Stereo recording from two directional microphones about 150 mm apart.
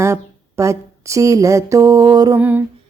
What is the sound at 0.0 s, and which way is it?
Speech, 20° right (ahead or behind).